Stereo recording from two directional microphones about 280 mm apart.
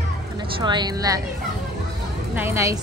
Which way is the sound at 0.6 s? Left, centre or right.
Centre.